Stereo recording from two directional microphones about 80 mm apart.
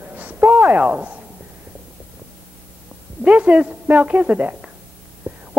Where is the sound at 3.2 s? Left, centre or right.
Centre.